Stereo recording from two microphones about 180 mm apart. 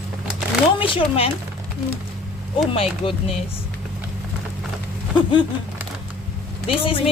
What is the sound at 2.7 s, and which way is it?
Speech, 30° left (ahead or behind).